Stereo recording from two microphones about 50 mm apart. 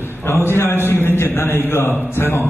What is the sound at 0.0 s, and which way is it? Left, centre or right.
A man's voice, left.